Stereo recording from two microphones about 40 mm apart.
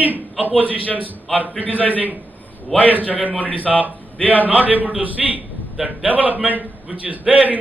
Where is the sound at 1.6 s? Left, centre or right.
Left.